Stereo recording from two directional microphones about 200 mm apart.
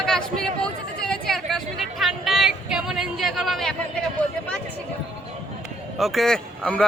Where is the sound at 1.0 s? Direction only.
5° left (ahead or behind).